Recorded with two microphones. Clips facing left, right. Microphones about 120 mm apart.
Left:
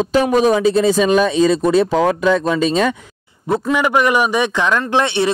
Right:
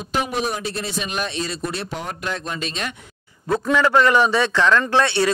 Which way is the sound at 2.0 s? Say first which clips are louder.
Left 15 dB; 90° left.